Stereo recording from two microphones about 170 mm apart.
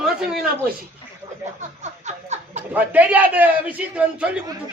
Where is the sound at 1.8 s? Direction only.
45° right (ahead or behind).